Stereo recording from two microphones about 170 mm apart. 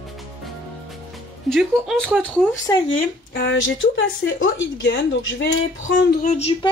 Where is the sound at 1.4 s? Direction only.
Centre (ahead or behind).